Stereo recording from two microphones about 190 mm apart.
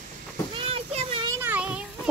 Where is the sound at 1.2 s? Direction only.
10° right (ahead or behind).